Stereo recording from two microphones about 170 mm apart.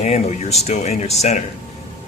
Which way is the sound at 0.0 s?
40° left (ahead or behind).